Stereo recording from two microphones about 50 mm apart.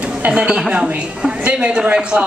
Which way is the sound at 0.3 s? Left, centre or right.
Centre.